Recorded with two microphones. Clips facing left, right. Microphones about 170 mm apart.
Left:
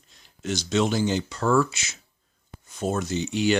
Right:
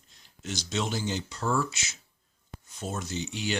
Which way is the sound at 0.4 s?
75° left (ahead or behind).